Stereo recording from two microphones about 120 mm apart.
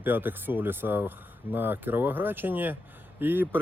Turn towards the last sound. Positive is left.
turn(degrees=-15)  # may be behind; listen again after turning